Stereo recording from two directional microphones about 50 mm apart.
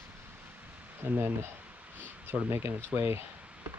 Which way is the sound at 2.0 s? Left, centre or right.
Right.